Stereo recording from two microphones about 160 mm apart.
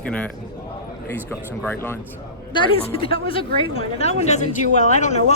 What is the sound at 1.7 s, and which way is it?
Speech, 15° left (ahead or behind).